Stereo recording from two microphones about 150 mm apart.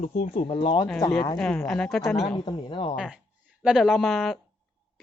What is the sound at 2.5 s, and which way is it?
Speech, 35° left (ahead or behind).